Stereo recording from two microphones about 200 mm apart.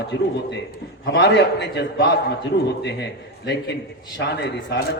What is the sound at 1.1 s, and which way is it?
A man's voice, 60° left (ahead or behind).